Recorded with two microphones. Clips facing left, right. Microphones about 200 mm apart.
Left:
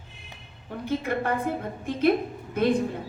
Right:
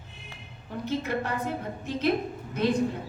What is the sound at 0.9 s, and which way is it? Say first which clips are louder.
A woman's voice: left 3 dB; 55° left (ahead or behind).